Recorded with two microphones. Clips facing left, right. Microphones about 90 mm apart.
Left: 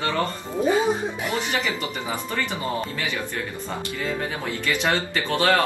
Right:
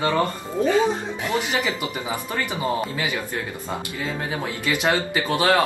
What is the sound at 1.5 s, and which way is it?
Speech, 20° right (ahead or behind).